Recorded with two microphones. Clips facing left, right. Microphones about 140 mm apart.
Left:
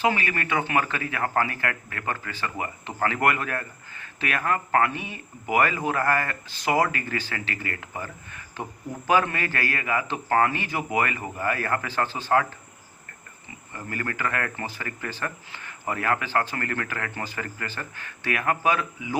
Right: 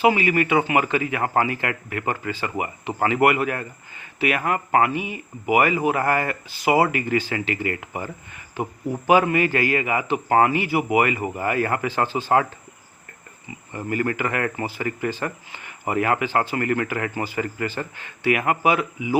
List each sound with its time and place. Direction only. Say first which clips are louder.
0.0 s a man's voice: right 6 dB; 15° right (ahead or behind)
13.7 s a man's voice: right 8 dB; 20° right (ahead or behind)